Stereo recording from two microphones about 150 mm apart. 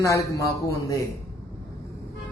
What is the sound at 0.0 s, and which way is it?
A man's voice, 20° left (ahead or behind).